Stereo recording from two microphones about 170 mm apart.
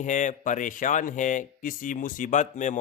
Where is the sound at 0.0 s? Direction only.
45° left (ahead or behind).